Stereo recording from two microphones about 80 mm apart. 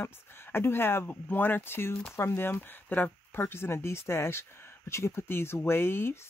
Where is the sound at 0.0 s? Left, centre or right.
Left.